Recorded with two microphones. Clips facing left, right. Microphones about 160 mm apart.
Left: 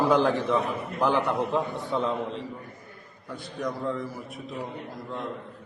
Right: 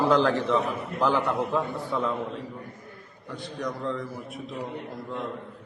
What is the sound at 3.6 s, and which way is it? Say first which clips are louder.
Speech: left 1 dB; 5° left (ahead or behind).